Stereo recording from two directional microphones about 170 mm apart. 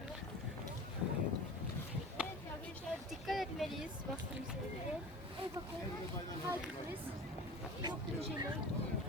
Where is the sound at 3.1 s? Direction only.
Centre (ahead or behind).